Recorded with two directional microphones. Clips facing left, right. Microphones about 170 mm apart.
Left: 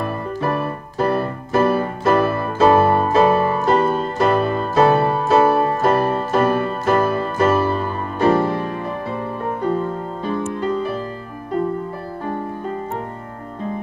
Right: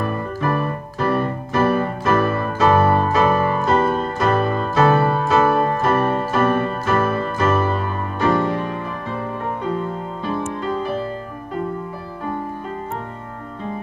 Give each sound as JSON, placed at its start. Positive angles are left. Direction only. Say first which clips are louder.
{"t": 0.4, "sound": "music", "louder": "even", "side_deg": 35}